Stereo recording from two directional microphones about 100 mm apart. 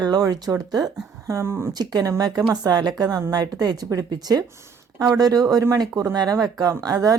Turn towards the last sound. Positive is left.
turn(degrees=-30)  # may be behind; listen again after turning